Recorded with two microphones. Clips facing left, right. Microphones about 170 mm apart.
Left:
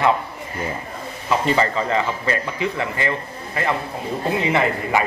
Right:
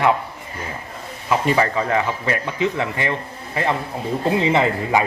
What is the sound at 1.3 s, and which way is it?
A man's voice, 10° right (ahead or behind).